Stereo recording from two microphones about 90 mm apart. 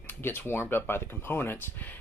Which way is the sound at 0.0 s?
25° left (ahead or behind).